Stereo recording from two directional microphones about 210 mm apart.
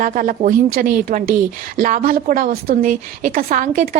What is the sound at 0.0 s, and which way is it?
A woman's voice, 40° right (ahead or behind).